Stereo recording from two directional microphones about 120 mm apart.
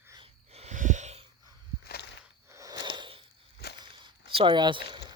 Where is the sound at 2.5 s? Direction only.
25° right (ahead or behind).